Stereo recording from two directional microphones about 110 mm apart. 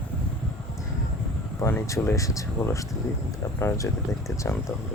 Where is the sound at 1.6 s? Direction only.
25° left (ahead or behind).